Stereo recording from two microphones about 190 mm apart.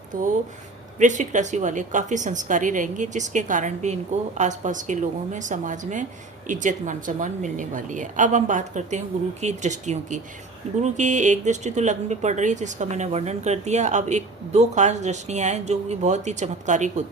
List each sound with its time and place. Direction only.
0.1 s speech: 45° right (ahead or behind)